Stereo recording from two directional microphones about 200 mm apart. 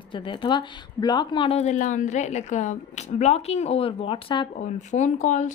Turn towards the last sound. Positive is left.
turn(degrees=35)  # may be behind; listen again after turning